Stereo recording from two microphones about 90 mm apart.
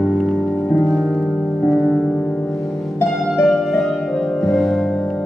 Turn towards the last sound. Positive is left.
turn(degrees=5)  # may be behind; listen again after turning